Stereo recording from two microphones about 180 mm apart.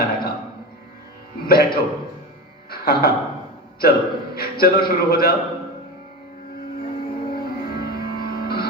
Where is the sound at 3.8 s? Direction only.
55° left (ahead or behind).